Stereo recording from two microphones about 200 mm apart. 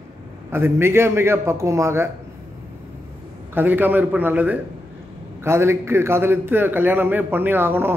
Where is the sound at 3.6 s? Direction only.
10° right (ahead or behind).